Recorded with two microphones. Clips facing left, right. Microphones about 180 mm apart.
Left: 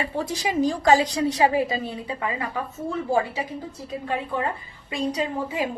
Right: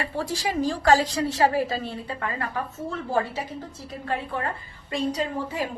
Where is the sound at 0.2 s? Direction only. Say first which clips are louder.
Left 2 dB; 20° left (ahead or behind).